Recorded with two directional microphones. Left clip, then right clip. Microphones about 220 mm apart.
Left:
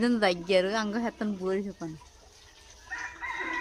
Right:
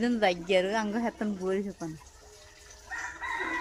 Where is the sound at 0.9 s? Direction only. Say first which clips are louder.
Even; 5° left (ahead or behind).